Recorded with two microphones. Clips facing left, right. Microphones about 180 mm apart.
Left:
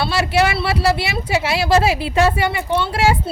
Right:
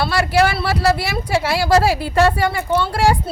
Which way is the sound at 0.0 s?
25° left (ahead or behind).